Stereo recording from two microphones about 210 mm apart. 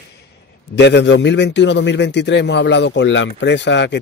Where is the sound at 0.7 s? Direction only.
55° left (ahead or behind).